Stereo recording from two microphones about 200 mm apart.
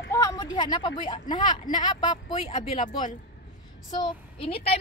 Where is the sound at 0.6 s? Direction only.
20° left (ahead or behind).